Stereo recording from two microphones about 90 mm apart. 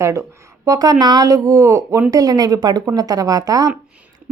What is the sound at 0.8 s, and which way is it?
A woman's voice, 50° right (ahead or behind).